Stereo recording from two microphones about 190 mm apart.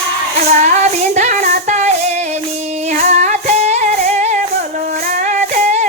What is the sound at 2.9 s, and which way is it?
Singing, 40° right (ahead or behind).